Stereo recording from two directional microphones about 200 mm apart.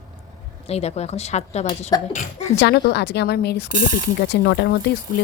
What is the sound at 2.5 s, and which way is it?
Speech, 60° left (ahead or behind).